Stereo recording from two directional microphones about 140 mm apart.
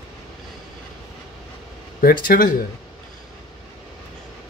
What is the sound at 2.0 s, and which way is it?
Speech, 85° left.